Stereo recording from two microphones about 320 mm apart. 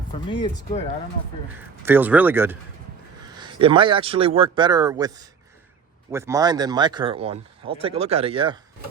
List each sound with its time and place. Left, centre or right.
0.3 s speech: centre
1.5 s a man's voice: centre